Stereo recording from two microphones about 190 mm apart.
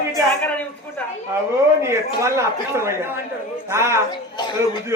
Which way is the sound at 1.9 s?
15° right (ahead or behind).